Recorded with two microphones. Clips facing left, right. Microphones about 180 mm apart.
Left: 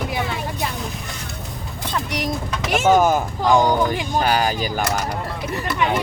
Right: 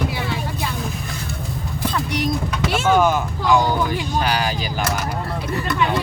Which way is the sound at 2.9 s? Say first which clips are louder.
Left 1 dB; 40° left (ahead or behind).